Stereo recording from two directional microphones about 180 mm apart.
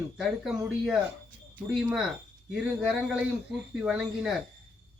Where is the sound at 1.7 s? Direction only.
Centre (ahead or behind).